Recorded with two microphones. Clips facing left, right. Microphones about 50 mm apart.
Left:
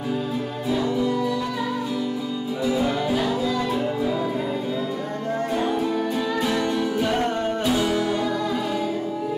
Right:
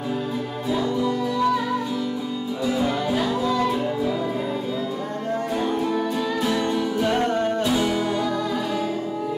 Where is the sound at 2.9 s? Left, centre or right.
Centre.